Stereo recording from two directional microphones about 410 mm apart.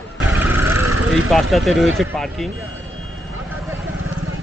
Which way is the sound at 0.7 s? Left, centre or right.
Right.